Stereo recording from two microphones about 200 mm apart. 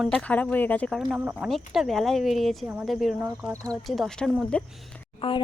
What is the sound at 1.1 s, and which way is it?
Speech, 10° right (ahead or behind).